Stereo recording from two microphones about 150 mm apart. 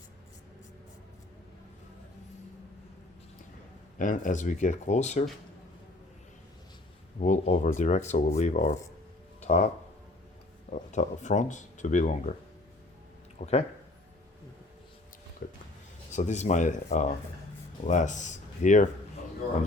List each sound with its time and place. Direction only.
3.9 s speech: 60° left (ahead or behind)
7.2 s speech: 55° left (ahead or behind)
9.4 s a sound: 50° left (ahead or behind)
10.7 s speech: 55° left (ahead or behind)
13.4 s speech: 45° left (ahead or behind)
16.1 s speech: 50° left (ahead or behind)